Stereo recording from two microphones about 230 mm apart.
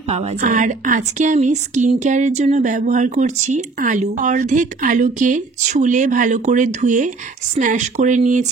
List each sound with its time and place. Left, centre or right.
0.1 s a woman's voice: right